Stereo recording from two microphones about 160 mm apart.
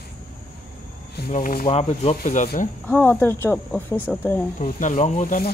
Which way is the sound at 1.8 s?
40° left (ahead or behind).